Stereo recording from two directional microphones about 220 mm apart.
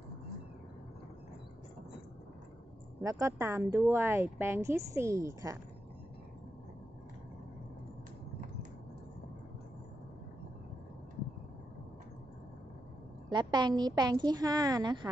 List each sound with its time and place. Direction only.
3.0 s speech: 15° right (ahead or behind)
13.3 s a woman's voice: 20° right (ahead or behind)